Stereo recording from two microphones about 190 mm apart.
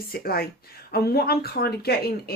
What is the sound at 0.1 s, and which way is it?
Speech, 50° left (ahead or behind).